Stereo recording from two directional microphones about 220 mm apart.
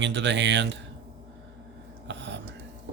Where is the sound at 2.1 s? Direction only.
55° right (ahead or behind).